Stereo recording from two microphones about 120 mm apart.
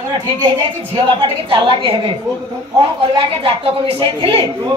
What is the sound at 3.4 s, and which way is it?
A woman's voice, 50° right (ahead or behind).